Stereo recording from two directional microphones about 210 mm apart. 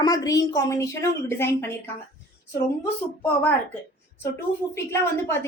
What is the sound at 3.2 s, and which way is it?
Speech, 5° left (ahead or behind).